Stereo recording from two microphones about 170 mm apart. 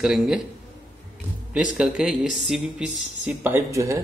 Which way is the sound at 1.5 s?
5° right (ahead or behind).